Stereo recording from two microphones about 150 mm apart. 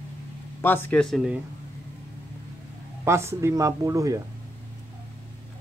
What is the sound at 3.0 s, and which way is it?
Speech, 20° right (ahead or behind).